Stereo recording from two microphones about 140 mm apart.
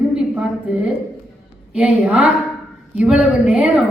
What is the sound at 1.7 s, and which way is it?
Speech, 10° right (ahead or behind).